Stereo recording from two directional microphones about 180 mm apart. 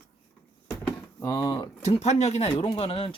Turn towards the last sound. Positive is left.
turn(degrees=30)  # may be behind; listen again after turning